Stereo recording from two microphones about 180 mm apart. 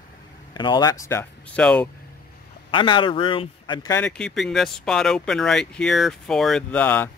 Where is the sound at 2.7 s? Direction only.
25° left (ahead or behind).